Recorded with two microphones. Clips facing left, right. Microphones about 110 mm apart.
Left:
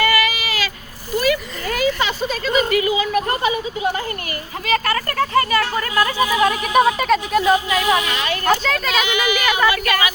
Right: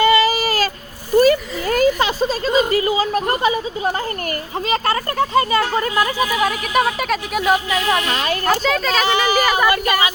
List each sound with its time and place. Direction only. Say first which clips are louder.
0.0 s baby cry: right 5 dB; 25° right (ahead or behind)
1.1 s a sound: right 6 dB; 40° right (ahead or behind)
2.5 s a sound: even; 30° right (ahead or behind)
4.7 s speech: even; 25° right (ahead or behind)
6.7 s music: left 4 dB; centre (ahead or behind)
7.8 s speech: left 1 dB; 10° left (ahead or behind)
8.1 s speech: right 2 dB; 40° right (ahead or behind)
8.4 s music: even; centre (ahead or behind)
9.0 s speech: right 3 dB; 30° right (ahead or behind)
9.6 s speech: right 1 dB; 45° right (ahead or behind)